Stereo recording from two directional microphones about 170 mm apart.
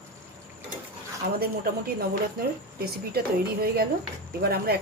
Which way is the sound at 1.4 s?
65° right (ahead or behind).